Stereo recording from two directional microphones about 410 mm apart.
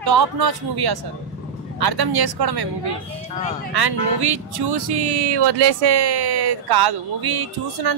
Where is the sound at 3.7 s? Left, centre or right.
Right.